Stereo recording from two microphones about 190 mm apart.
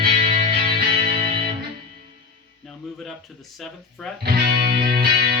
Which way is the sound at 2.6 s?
Centre (ahead or behind).